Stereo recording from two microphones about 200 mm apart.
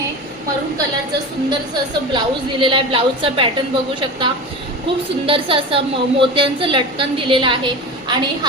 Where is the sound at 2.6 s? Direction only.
25° right (ahead or behind).